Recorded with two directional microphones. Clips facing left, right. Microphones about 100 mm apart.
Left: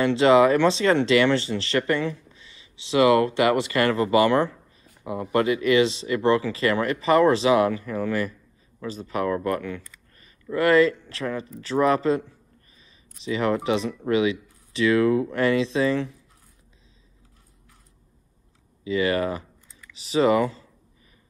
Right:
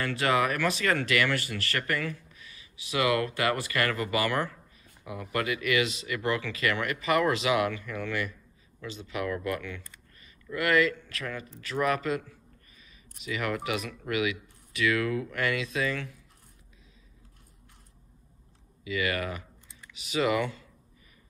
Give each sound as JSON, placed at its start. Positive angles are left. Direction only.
{"t": 0.0, "sound": "speech", "side_deg": 20}
{"t": 18.9, "sound": "speech", "side_deg": 30}